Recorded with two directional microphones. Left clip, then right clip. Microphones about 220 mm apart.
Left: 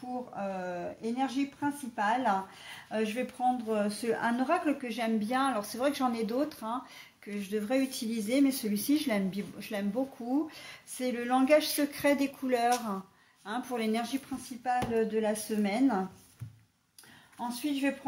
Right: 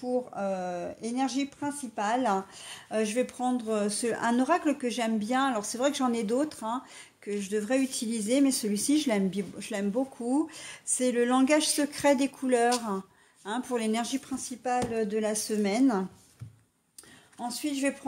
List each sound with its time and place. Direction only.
0.4 s speech: 50° right (ahead or behind)
17.5 s speech: 50° right (ahead or behind)